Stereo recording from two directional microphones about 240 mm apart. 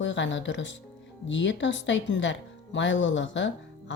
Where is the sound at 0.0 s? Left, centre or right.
Left.